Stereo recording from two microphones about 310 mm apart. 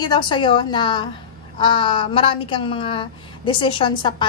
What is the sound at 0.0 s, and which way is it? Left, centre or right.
A woman's voice, centre.